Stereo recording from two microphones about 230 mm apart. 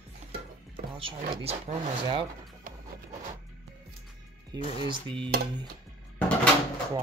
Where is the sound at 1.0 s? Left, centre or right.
Right.